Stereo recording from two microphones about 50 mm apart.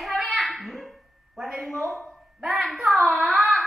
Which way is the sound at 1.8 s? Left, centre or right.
Right.